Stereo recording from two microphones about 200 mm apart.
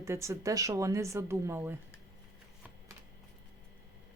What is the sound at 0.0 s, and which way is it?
Speech, 15° right (ahead or behind).